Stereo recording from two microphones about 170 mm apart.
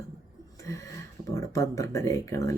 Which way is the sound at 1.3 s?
20° left (ahead or behind).